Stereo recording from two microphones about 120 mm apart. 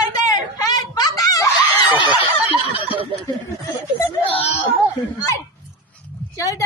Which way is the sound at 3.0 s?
50° right (ahead or behind).